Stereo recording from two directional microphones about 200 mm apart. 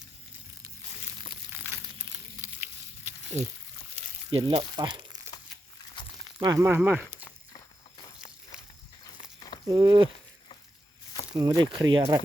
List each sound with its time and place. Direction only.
2.4 s a sound: 10° right (ahead or behind)
3.3 s speech: 35° right (ahead or behind)
6.0 s a sound: 25° left (ahead or behind)
6.4 s speech: 15° right (ahead or behind)
8.5 s livestock: 5° right (ahead or behind)
9.6 s speech: 20° right (ahead or behind)
11.3 s speech: 20° right (ahead or behind)